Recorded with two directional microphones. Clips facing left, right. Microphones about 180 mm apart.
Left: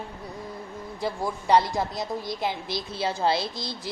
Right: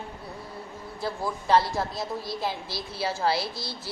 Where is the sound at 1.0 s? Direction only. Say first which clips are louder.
Left 2 dB; 20° left (ahead or behind).